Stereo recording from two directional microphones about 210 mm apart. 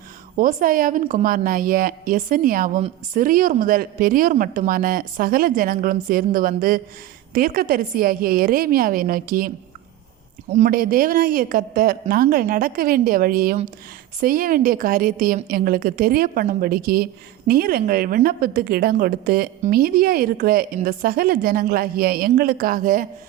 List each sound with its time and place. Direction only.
0.3 s a woman's voice: 40° right (ahead or behind)
10.6 s a woman's voice: 45° right (ahead or behind)